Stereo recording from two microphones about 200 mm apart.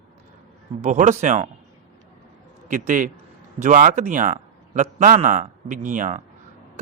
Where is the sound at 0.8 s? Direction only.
35° right (ahead or behind).